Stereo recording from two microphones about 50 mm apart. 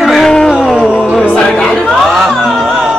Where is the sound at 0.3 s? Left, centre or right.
Centre.